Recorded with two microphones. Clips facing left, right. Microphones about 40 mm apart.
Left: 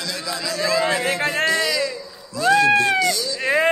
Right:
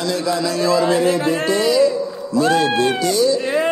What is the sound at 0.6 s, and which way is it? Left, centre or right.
Speech, left.